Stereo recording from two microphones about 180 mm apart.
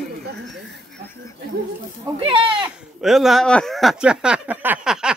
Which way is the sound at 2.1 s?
30° right (ahead or behind).